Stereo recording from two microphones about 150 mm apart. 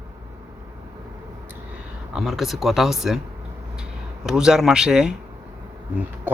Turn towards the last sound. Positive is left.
turn(degrees=-10)  # may be behind; listen again after turning